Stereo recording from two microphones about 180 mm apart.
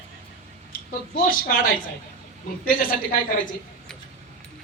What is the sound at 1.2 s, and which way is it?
Speech, 50° left (ahead or behind).